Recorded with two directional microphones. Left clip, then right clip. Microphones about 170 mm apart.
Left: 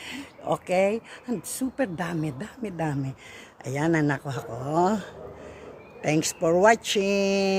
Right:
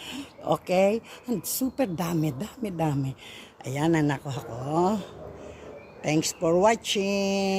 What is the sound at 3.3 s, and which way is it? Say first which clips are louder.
Speech: left 1 dB; 25° left (ahead or behind).